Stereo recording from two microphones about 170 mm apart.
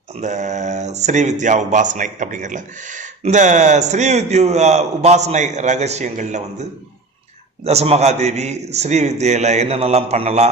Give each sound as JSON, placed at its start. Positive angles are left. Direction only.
{"t": 0.2, "sound": "a man's voice", "side_deg": -45}